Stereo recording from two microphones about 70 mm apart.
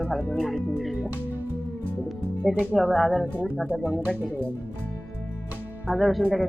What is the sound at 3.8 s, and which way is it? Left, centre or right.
Speech, right.